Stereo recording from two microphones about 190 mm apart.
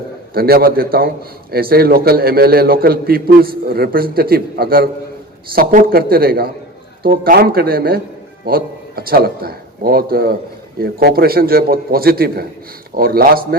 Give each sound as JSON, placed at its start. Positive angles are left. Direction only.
{"t": 0.3, "sound": "a man's voice", "side_deg": -55}